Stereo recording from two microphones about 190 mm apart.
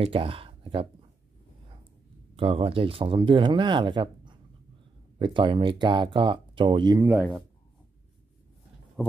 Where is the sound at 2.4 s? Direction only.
30° right (ahead or behind).